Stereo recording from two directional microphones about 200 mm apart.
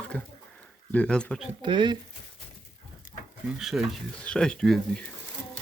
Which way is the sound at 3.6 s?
Centre (ahead or behind).